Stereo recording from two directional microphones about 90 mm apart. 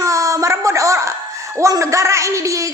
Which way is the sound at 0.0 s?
35° right (ahead or behind).